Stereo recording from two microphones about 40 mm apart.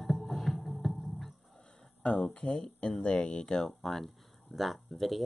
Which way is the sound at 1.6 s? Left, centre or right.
Centre.